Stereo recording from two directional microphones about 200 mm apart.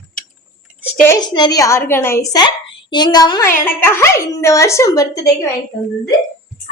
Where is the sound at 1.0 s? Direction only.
20° left (ahead or behind).